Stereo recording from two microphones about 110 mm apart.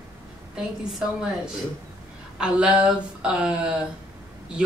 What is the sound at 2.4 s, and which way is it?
Speech, 10° right (ahead or behind).